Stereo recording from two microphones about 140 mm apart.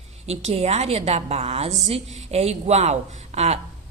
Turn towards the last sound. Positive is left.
turn(degrees=-50)  # may be behind; listen again after turning